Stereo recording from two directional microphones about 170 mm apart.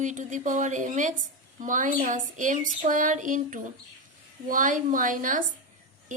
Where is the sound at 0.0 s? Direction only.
45° right (ahead or behind).